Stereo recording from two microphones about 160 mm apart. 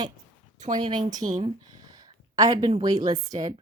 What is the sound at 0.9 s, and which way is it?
A woman's voice, 30° right (ahead or behind).